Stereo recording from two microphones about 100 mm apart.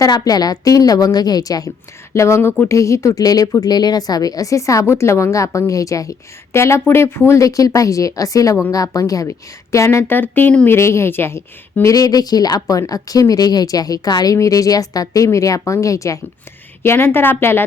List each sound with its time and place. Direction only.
0.0 s speech: 40° left (ahead or behind); by 10.8 s 15° left (ahead or behind)
10.8 s speech: 30° left (ahead or behind)